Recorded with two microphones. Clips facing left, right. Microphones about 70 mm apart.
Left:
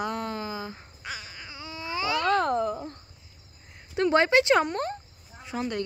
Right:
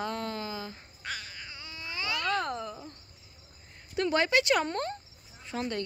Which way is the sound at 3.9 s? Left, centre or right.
Left.